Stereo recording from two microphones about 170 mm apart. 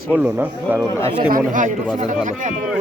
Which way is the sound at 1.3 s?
50° right (ahead or behind).